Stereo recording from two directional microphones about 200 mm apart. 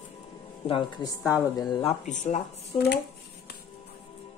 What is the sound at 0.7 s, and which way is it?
Speech, 25° left (ahead or behind).